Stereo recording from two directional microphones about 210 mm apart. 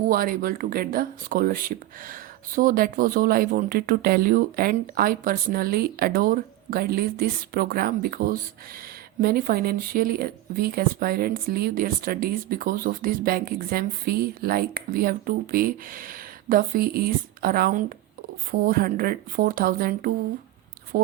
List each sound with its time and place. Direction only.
0.1 s speech: 45° right (ahead or behind)